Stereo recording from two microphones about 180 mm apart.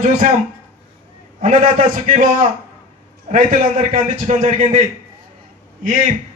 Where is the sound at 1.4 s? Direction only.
45° right (ahead or behind).